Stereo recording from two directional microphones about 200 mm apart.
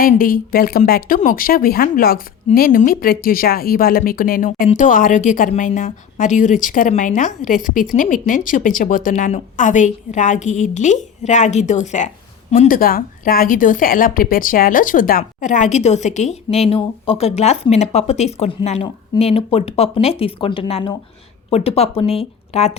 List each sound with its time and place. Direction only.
0.0 s speech: 45° left (ahead or behind)